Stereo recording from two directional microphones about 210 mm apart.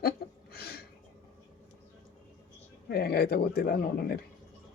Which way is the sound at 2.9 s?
50° left (ahead or behind).